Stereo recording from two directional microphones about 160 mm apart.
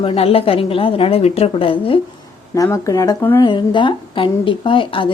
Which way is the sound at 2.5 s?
20° left (ahead or behind).